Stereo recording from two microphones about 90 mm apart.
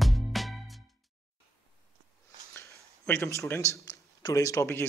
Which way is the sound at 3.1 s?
35° left (ahead or behind).